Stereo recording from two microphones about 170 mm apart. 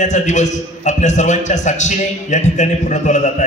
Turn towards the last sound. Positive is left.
turn(degrees=45)  # may be behind; listen again after turning